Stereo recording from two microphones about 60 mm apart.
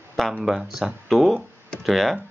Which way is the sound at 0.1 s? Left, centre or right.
Centre.